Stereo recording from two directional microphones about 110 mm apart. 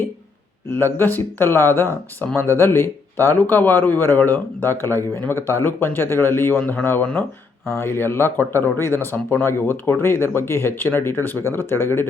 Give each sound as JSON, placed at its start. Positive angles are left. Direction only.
{"t": 0.7, "sound": "speech", "side_deg": 20}